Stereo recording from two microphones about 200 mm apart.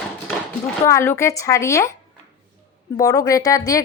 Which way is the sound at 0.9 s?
15° left (ahead or behind).